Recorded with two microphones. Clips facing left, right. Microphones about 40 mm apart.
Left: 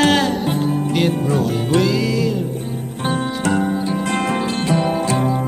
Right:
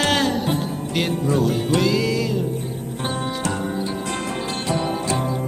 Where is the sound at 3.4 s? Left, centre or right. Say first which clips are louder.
Left 6 dB; left.